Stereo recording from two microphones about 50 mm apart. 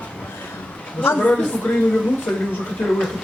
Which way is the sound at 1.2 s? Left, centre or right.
Left.